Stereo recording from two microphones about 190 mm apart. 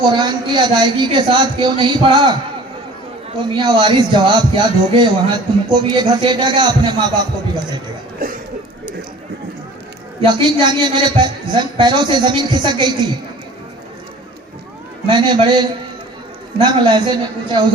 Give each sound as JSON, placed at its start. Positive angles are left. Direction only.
{"t": 0.0, "sound": "speech", "side_deg": -25}
{"t": 3.4, "sound": "speech", "side_deg": -25}
{"t": 8.2, "sound": "a sound", "side_deg": -50}
{"t": 10.2, "sound": "speech", "side_deg": -25}
{"t": 15.0, "sound": "speech", "side_deg": -25}